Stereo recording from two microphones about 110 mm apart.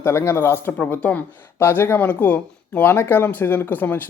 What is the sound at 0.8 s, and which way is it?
Speech, 15° left (ahead or behind).